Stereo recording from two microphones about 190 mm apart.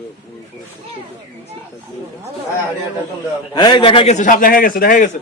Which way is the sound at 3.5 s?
25° left (ahead or behind).